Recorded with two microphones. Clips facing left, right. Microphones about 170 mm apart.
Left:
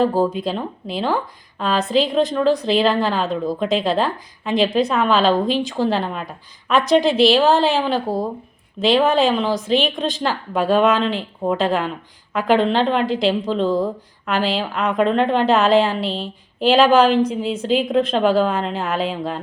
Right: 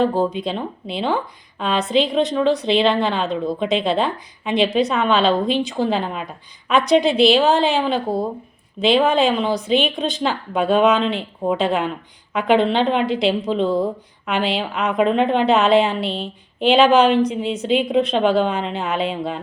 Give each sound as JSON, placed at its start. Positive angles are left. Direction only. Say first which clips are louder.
{"t": 0.0, "sound": "a woman's voice", "louder": "left 1 dB", "side_deg": 0}